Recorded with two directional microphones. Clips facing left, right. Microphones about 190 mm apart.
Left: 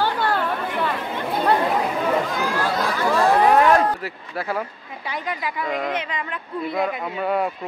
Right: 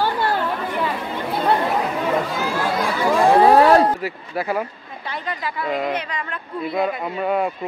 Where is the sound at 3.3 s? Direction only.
35° right (ahead or behind).